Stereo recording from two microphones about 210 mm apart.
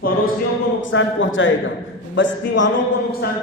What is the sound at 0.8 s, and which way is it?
A man's voice, 65° left (ahead or behind).